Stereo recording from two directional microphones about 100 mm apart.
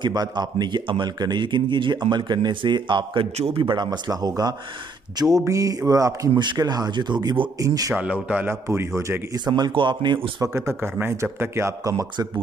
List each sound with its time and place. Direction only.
0.0 s speech: 45° right (ahead or behind)
3.3 s a man's voice: 90° right
3.6 s mantra: 45° right (ahead or behind)
6.3 s speech: 50° right (ahead or behind)
7.9 s speech: 15° right (ahead or behind)
8.5 s speech: 25° right (ahead or behind)
9.5 s speech: 50° right (ahead or behind)
10.4 s speech: 25° right (ahead or behind)